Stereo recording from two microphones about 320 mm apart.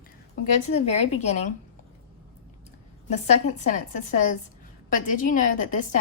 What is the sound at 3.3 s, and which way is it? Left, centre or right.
A woman's voice, left.